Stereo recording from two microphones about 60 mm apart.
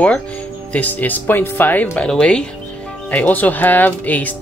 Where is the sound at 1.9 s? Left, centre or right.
Centre.